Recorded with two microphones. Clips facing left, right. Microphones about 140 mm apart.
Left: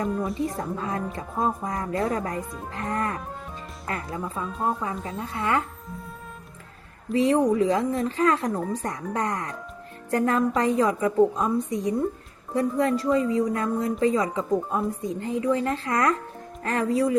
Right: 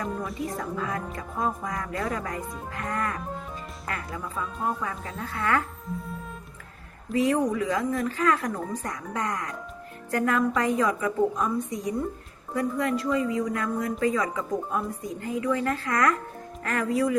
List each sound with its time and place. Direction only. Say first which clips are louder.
0.3 s a woman's voice: left 2 dB; 30° left (ahead or behind)
5.9 s music: right 4 dB; centre (ahead or behind)
7.1 s a woman's voice: left 3 dB; 30° left (ahead or behind)